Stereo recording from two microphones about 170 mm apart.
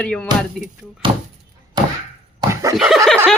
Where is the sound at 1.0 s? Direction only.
30° right (ahead or behind).